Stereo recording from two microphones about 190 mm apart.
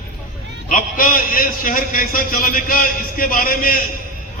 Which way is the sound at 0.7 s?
45° left (ahead or behind).